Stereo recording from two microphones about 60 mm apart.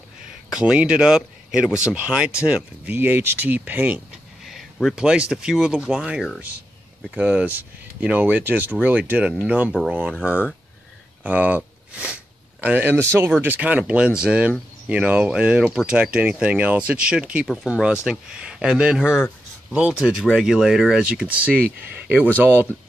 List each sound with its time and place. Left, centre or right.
0.5 s speech: centre
3.0 s speech: right
4.9 s speech: centre
11.2 s sniff: right
13.4 s speech: right
20.0 s speech: centre
21.0 s speech: right